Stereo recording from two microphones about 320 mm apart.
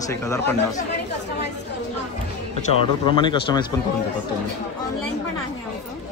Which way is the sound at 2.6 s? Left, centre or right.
Centre.